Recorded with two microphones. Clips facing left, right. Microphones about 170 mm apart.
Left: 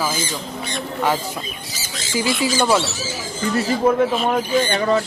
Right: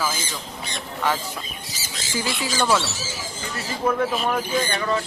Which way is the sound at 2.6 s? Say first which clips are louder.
Left 2 dB; 15° left (ahead or behind).